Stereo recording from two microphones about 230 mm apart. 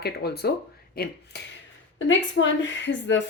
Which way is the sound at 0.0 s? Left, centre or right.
Left.